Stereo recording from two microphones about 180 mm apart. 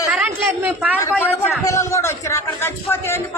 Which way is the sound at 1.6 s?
15° left (ahead or behind).